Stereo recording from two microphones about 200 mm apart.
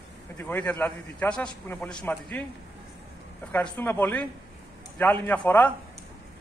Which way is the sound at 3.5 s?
10° left (ahead or behind).